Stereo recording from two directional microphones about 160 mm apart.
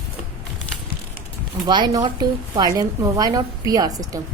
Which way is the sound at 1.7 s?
30° right (ahead or behind).